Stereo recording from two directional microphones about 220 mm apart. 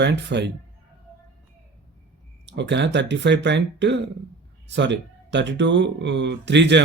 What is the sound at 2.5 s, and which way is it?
Speech, 50° right (ahead or behind).